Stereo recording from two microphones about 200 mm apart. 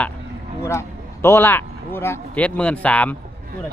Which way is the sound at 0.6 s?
15° left (ahead or behind).